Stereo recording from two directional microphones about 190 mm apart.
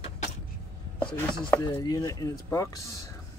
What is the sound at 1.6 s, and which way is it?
Speech, 20° left (ahead or behind).